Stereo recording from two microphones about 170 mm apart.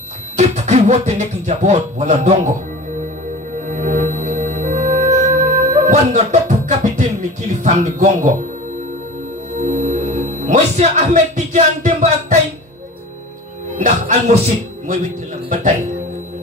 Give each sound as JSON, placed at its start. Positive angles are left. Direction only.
{"t": 0.4, "sound": "speech", "side_deg": -40}
{"t": 3.6, "sound": "music", "side_deg": -45}
{"t": 9.6, "sound": "speech", "side_deg": -45}
{"t": 13.7, "sound": "speech", "side_deg": -45}